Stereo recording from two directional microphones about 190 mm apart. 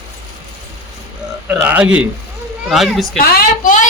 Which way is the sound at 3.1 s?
50° left (ahead or behind).